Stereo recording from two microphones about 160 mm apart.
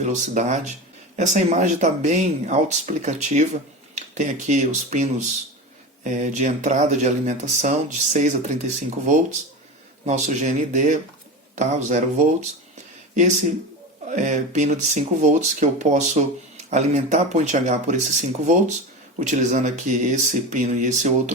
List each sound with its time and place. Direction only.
0.0 s speech: 45° right (ahead or behind)
14.1 s speech: 50° right (ahead or behind)